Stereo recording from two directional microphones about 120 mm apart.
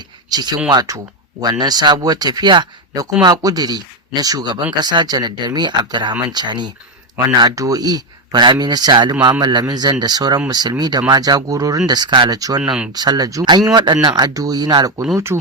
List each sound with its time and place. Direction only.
0.3 s speech: 35° right (ahead or behind)
15.1 s speech: 20° right (ahead or behind)